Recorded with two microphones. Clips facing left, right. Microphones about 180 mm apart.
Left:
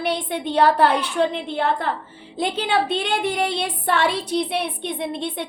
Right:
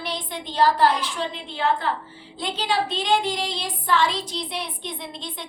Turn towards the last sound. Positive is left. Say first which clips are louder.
# left 9 dB
turn(degrees=60)  # may be behind; listen again after turning